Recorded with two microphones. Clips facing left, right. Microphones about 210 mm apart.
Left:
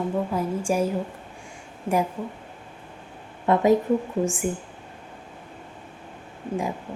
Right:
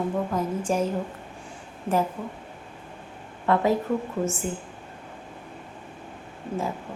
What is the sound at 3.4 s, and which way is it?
Speech, 20° left (ahead or behind).